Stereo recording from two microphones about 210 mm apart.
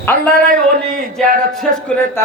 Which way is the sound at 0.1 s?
40° right (ahead or behind).